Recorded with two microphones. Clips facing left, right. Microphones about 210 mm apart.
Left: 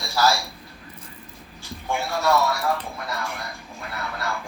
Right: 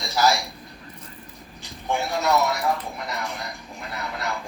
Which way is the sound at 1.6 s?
20° right (ahead or behind).